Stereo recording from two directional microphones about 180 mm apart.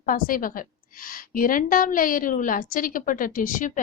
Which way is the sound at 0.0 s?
50° left (ahead or behind).